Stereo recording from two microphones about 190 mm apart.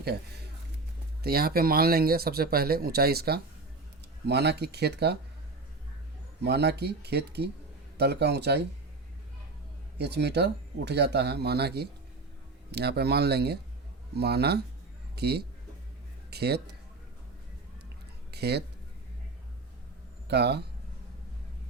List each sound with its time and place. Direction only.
1.2 s speech: 50° right (ahead or behind)
6.4 s speech: 60° right (ahead or behind)
10.0 s speech: 60° right (ahead or behind)
18.3 s a sound: 60° right (ahead or behind)
20.2 s speech: 60° right (ahead or behind)